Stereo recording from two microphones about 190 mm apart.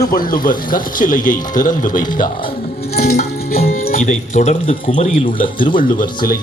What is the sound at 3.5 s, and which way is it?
Music, 55° left (ahead or behind).